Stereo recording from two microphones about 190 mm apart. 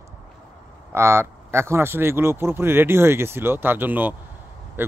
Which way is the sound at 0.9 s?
15° right (ahead or behind).